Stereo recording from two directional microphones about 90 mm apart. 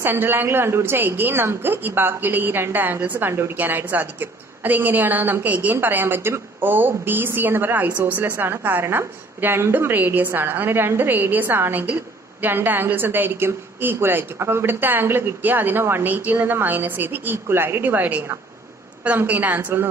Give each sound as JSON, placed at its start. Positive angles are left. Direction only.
{"t": 0.0, "sound": "a woman's voice", "side_deg": -25}